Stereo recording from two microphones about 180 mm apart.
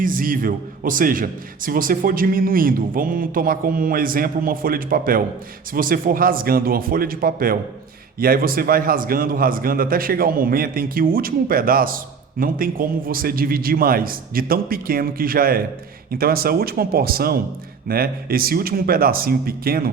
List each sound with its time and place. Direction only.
0.0 s a man's voice: 50° right (ahead or behind)